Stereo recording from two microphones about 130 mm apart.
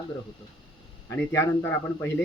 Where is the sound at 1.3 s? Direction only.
15° left (ahead or behind).